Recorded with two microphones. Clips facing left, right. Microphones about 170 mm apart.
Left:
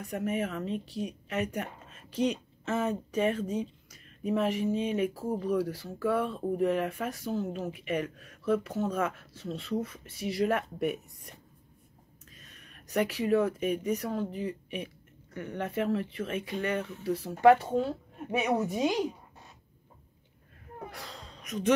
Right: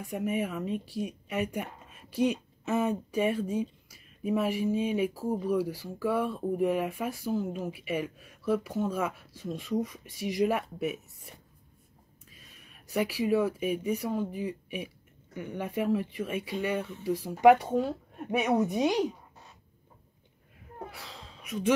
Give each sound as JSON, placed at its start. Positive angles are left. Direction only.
{"t": 0.0, "sound": "a woman's voice", "side_deg": -10}
{"t": 10.8, "sound": "a woman's voice", "side_deg": 0}
{"t": 20.9, "sound": "gasp", "side_deg": 0}